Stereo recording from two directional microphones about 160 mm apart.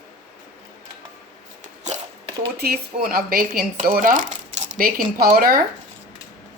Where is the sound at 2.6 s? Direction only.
70° right (ahead or behind).